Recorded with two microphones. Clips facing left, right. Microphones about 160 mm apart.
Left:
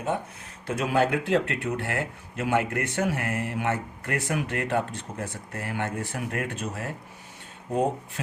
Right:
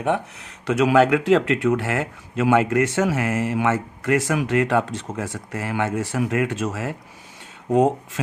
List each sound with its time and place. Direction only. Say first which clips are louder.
0.7 s speech: right 8 dB; 90° right